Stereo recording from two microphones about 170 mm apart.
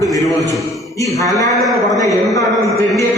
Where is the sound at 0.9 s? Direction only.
20° left (ahead or behind).